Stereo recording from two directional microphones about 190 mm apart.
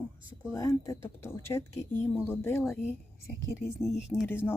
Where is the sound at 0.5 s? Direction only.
15° left (ahead or behind).